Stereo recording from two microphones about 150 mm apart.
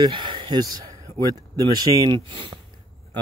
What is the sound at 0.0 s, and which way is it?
Speech, 30° right (ahead or behind).